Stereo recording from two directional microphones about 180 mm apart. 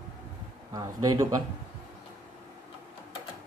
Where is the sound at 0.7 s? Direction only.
20° right (ahead or behind).